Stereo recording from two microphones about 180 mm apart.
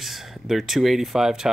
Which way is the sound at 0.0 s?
Centre (ahead or behind).